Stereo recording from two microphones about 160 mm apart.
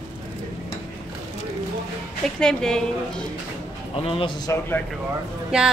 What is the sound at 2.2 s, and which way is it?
Speech, 5° left (ahead or behind).